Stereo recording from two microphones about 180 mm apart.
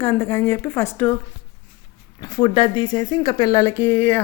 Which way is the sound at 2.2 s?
20° left (ahead or behind).